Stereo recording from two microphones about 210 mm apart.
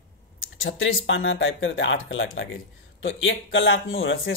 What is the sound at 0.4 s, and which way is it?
Speech, 70° left (ahead or behind).